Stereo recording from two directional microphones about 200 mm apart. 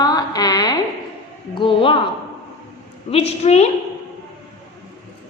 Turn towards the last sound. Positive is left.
turn(degrees=30)  # may be behind; listen again after turning